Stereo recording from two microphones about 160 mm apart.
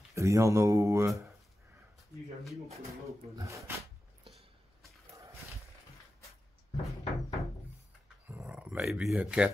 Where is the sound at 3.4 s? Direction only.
20° right (ahead or behind).